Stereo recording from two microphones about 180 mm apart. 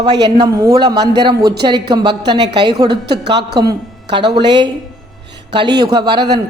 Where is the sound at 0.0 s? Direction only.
25° right (ahead or behind).